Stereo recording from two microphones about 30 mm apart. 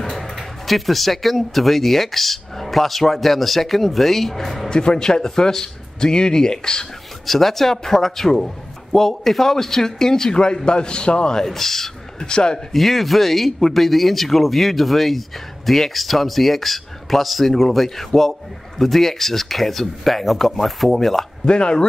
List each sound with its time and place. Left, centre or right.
0.4 s speech: centre
4.6 s speech: left
7.2 s speech: centre; by 11.4 s left
11.4 s speech: centre
12.2 s speech: left
12.7 s speech: centre
21.5 s speech: left